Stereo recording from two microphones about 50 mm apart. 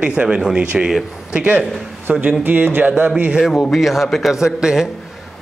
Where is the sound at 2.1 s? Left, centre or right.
Right.